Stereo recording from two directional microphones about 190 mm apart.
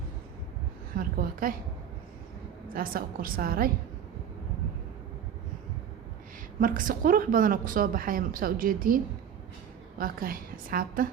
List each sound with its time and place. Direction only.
0.9 s a woman's voice: 50° right (ahead or behind)
2.7 s a woman's voice: 50° right (ahead or behind)
6.6 s a woman's voice: 45° right (ahead or behind)
10.0 s a woman's voice: 50° right (ahead or behind)